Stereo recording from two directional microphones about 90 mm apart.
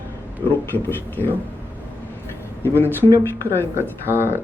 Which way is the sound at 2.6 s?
25° left (ahead or behind).